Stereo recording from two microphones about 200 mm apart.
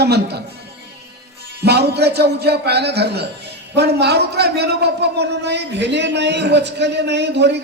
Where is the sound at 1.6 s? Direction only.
55° right (ahead or behind).